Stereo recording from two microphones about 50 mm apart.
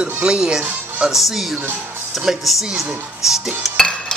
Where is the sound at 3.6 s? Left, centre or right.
Centre.